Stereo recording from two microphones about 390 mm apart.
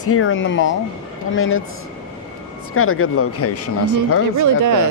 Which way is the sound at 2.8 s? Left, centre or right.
Left.